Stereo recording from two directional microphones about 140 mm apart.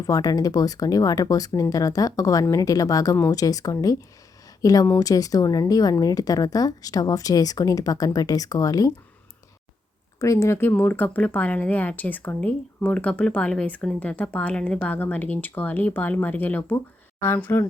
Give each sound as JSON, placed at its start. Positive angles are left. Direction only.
{"t": 0.0, "sound": "a woman's voice", "side_deg": 25}
{"t": 10.2, "sound": "speech", "side_deg": 20}